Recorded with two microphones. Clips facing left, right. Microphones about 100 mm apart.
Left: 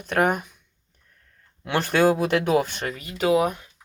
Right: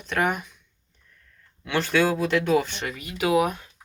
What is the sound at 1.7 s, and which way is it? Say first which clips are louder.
Speech: left 3 dB; 50° left (ahead or behind).